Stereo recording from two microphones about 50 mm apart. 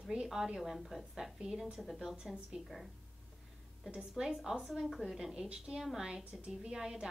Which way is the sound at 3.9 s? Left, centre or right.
Centre.